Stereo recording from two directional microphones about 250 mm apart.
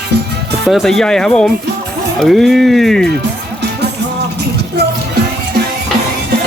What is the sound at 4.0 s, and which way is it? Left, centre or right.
Music, right.